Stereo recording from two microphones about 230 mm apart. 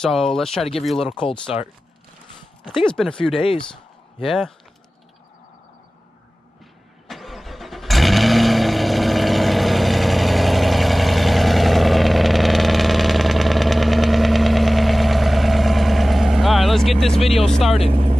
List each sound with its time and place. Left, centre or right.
0.0 s speech: centre
2.8 s speech: centre
3.3 s speech: left
4.2 s speech: centre
7.1 s vehicle: centre
17.4 s speech: centre
17.8 s speech: right